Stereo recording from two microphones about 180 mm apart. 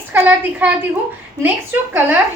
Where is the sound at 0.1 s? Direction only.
10° right (ahead or behind).